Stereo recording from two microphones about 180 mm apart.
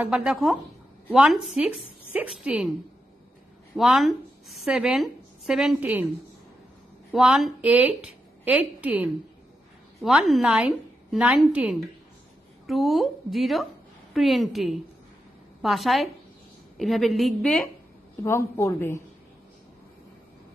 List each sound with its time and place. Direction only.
0.0 s a woman's voice: 5° right (ahead or behind)
3.7 s a woman's voice: centre (ahead or behind)
7.1 s a woman's voice: centre (ahead or behind)
18.2 s a woman's voice: 15° left (ahead or behind)